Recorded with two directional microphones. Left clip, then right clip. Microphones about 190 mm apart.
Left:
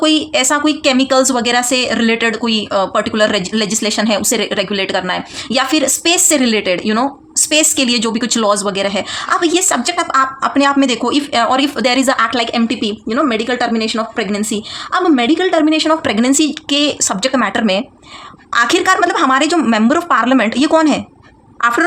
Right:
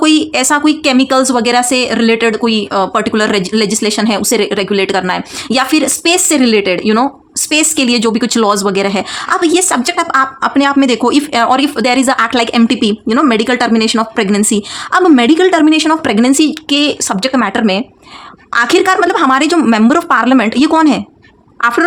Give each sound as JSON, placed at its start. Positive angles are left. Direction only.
{"t": 0.0, "sound": "speech", "side_deg": -30}
{"t": 16.0, "sound": "speech", "side_deg": -25}